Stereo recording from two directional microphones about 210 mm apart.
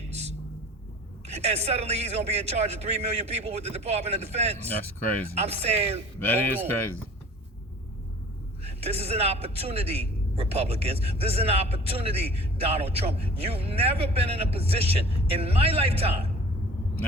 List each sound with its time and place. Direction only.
0.1 s a sound: 30° right (ahead or behind)
1.3 s a man's voice: 30° right (ahead or behind)
6.1 s speech: 10° left (ahead or behind)
8.6 s a man's voice: 30° right (ahead or behind)